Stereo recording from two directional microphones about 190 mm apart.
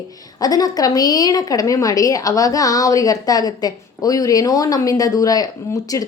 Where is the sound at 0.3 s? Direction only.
20° left (ahead or behind).